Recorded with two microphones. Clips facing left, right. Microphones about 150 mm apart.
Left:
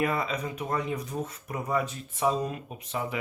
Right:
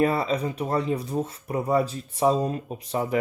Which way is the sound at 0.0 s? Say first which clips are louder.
Right 6 dB; 35° right (ahead or behind).